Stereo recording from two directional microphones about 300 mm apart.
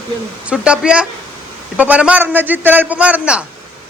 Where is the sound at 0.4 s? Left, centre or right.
Centre.